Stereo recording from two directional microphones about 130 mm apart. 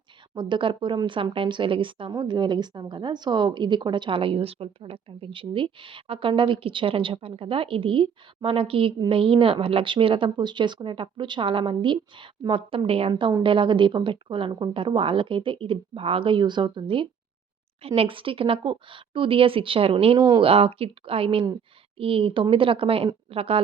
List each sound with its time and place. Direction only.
0.3 s a woman's voice: 40° right (ahead or behind)
20.1 s speech: 30° right (ahead or behind)
20.4 s a woman's voice: 45° right (ahead or behind)